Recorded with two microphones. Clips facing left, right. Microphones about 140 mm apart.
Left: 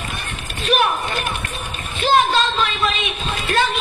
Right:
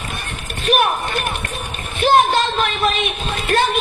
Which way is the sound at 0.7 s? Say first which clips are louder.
Right 1 dB; 55° right (ahead or behind).